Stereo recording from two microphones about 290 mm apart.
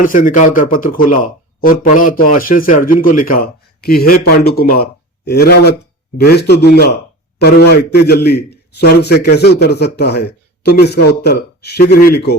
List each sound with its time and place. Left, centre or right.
0.0 s a man's voice: left